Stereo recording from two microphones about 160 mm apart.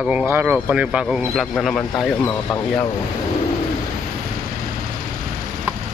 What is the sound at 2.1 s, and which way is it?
Speech, 15° left (ahead or behind).